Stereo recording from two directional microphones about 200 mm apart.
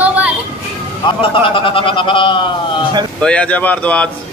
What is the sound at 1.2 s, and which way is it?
A man's voice, 25° left (ahead or behind).